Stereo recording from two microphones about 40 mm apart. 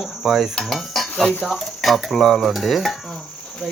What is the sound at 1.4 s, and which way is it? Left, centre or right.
Speech, centre.